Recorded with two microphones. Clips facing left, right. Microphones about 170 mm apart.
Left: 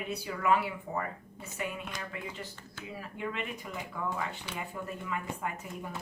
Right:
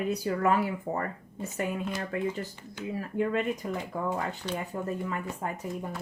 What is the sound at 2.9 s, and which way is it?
Speech, 45° right (ahead or behind).